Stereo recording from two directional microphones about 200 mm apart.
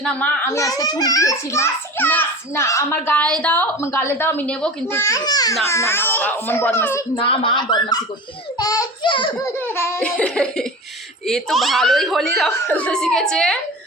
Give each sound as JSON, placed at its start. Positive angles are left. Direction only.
{"t": 0.0, "sound": "a child's voice", "side_deg": 5}
{"t": 7.2, "sound": "speech", "side_deg": 25}
{"t": 8.5, "sound": "a sound", "side_deg": 20}
{"t": 9.4, "sound": "a child's voice", "side_deg": 10}